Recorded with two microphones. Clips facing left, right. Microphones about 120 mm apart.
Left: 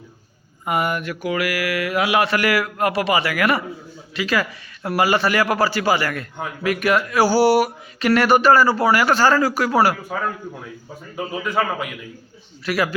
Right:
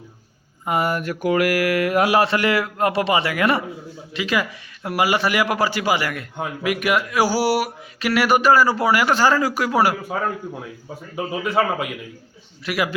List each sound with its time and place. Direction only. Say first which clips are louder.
0.6 s mantra: even; 30° right (ahead or behind)
2.2 s a man's voice: even; 25° right (ahead or behind)
11.4 s a man's voice: right 2 dB; 25° right (ahead or behind)